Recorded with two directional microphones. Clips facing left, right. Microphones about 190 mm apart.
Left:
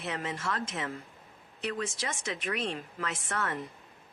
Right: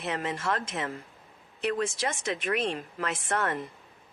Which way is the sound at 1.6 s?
55° right (ahead or behind).